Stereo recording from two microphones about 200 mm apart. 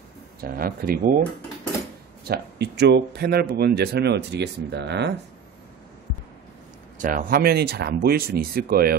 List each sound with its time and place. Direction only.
0.4 s speech: 45° right (ahead or behind)
2.2 s speech: 55° right (ahead or behind)
7.0 s speech: 40° right (ahead or behind)